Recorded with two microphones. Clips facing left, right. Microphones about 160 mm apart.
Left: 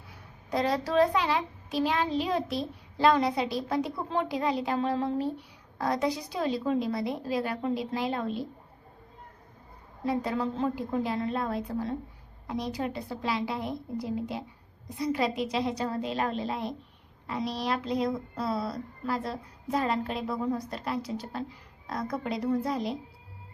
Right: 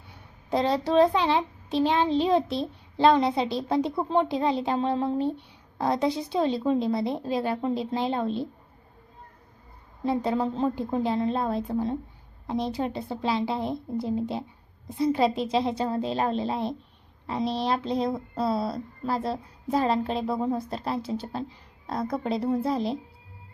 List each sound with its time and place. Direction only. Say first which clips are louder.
0.5 s a child's voice: right 4 dB; 25° right (ahead or behind)
10.0 s a child's voice: right 4 dB; 25° right (ahead or behind)